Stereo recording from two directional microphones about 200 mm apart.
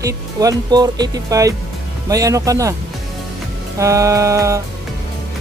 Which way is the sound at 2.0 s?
15° right (ahead or behind).